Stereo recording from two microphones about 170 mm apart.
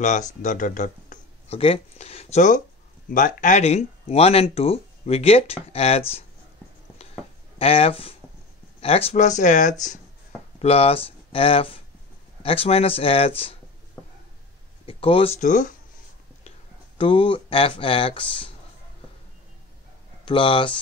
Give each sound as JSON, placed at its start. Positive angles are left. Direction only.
{"t": 0.0, "sound": "speech", "side_deg": 45}
{"t": 1.6, "sound": "speech", "side_deg": 35}
{"t": 7.5, "sound": "speech", "side_deg": 35}
{"t": 14.9, "sound": "speech", "side_deg": 30}
{"t": 17.0, "sound": "speech", "side_deg": 30}
{"t": 20.2, "sound": "speech", "side_deg": 30}